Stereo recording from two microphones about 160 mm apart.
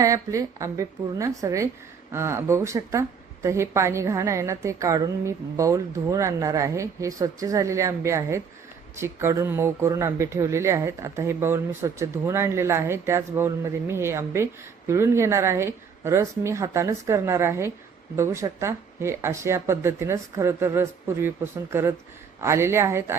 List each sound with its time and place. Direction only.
0.0 s a woman's voice: 20° right (ahead or behind)